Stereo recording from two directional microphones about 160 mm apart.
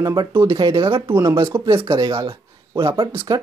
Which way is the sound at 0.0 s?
25° right (ahead or behind).